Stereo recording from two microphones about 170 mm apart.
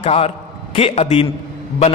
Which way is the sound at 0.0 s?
35° left (ahead or behind).